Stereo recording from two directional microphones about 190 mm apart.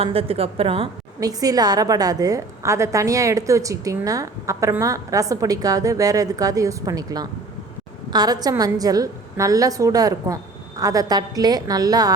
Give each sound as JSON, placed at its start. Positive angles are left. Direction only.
{"t": 0.0, "sound": "a woman's voice", "side_deg": -30}
{"t": 1.2, "sound": "a woman's voice", "side_deg": -20}